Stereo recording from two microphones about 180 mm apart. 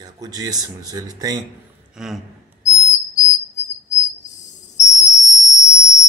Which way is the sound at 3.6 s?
40° left (ahead or behind).